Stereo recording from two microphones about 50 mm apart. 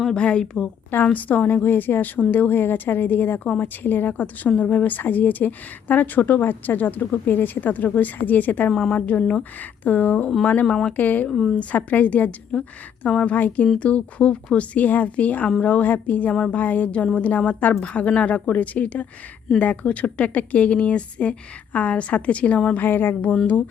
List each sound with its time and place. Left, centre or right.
0.2 s a woman's voice: centre
1.0 s a woman's voice: left
4.4 s a woman's voice: left
8.9 s a woman's voice: left
10.7 s speech: centre
10.9 s a woman's voice: left
11.3 s a woman's voice: centre
11.9 s a woman's voice: left
22.8 s a sound: left